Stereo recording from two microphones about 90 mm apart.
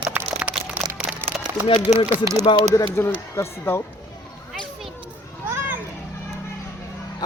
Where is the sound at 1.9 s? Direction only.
90° left.